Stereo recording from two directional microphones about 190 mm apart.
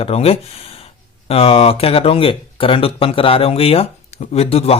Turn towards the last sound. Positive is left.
turn(degrees=30)  # may be behind; listen again after turning